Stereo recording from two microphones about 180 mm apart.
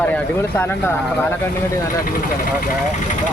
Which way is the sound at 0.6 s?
10° left (ahead or behind).